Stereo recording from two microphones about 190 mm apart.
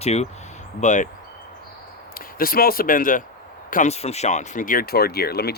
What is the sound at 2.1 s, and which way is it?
Speech, 50° left (ahead or behind).